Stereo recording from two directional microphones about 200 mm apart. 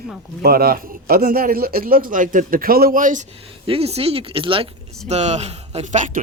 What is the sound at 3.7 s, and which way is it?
A man's voice, 30° right (ahead or behind).